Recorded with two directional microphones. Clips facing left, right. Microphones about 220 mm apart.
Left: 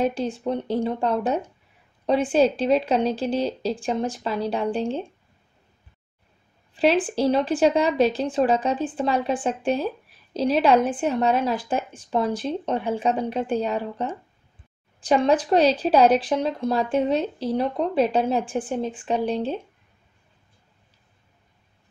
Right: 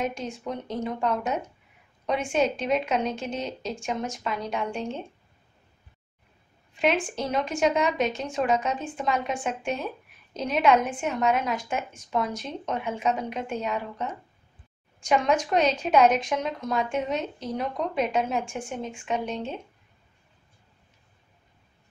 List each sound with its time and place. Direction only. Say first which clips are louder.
0.0 s a woman's voice: left 7 dB; 30° left (ahead or behind)
6.7 s a woman's voice: left 5 dB; 30° left (ahead or behind)